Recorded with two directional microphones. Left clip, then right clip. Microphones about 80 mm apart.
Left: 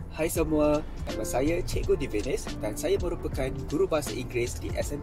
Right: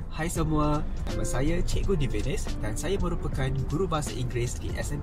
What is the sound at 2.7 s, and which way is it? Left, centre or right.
Speech, right.